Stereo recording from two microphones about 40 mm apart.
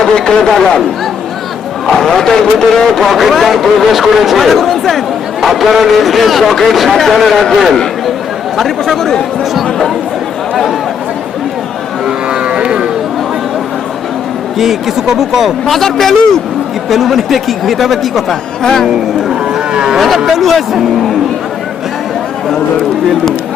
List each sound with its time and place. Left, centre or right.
0.0 s speech: centre
1.9 s a man's voice: centre
8.5 s a man's voice: centre
12.0 s moo: right
14.6 s a man's voice: centre
15.6 s a man's voice: centre
16.9 s a man's voice: centre
18.6 s a man's voice: centre
19.3 s cattle: centre
20.0 s a man's voice: centre